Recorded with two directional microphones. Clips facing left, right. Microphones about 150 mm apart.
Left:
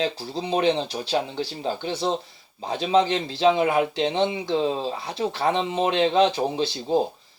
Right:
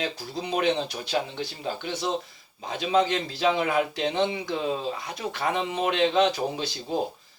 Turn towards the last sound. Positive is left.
turn(degrees=30)  # may be behind; listen again after turning